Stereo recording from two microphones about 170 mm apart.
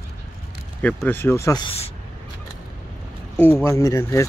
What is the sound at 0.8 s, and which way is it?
Speech, 10° left (ahead or behind).